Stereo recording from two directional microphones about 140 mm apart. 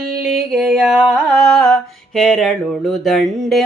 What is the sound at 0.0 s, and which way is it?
Music, 90° right.